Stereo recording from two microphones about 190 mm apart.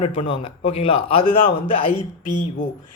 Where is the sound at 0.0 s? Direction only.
30° left (ahead or behind).